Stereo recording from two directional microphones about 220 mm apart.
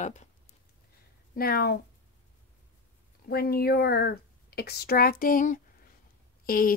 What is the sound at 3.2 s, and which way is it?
A woman's voice, 45° left (ahead or behind).